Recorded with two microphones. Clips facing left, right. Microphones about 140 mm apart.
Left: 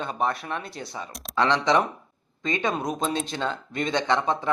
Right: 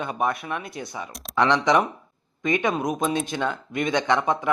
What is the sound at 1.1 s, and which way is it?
Speech, centre (ahead or behind).